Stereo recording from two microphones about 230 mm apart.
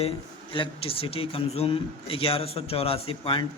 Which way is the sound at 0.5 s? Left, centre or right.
Left.